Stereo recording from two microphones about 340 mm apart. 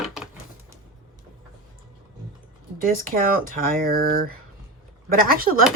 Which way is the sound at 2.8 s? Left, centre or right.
Right.